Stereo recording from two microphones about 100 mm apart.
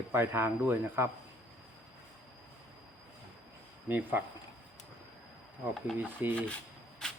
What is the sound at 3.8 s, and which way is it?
Speech, 20° right (ahead or behind).